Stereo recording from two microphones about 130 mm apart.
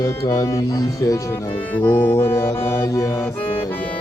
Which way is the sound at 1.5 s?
10° left (ahead or behind).